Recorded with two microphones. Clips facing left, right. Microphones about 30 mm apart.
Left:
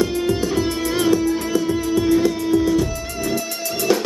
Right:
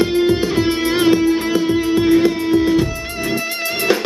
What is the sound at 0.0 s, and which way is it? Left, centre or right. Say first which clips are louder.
Music: right 5 dB; right.